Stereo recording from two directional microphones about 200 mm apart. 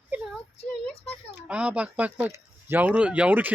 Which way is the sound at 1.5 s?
5° right (ahead or behind).